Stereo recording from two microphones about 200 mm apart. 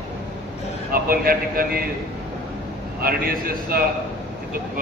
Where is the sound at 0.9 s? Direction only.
45° right (ahead or behind).